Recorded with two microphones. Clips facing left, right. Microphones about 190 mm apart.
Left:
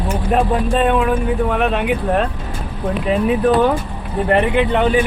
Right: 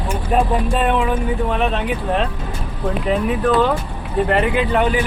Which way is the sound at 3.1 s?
15° left (ahead or behind).